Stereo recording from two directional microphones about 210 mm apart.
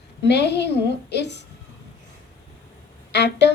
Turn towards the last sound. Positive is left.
turn(degrees=55)  # may be behind; listen again after turning